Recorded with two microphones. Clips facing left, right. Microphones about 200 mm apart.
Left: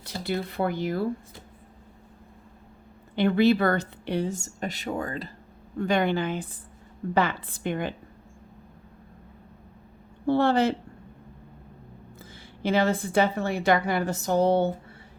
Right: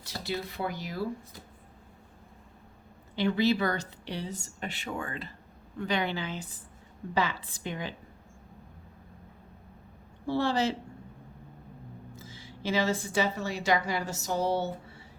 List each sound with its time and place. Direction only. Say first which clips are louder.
0.0 s a woman's voice: left 5 dB; 55° left (ahead or behind)
3.2 s speech: left 5 dB; 55° left (ahead or behind); by 5.3 s 40° left (ahead or behind)
5.8 s a woman's voice: left 7 dB; 50° left (ahead or behind)
10.2 s a woman's voice: left 6 dB; 55° left (ahead or behind)
12.2 s a woman's voice: left 6 dB; 55° left (ahead or behind)